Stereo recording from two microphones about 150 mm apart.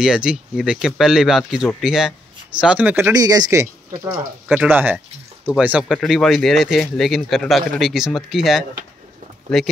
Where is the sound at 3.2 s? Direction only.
25° right (ahead or behind).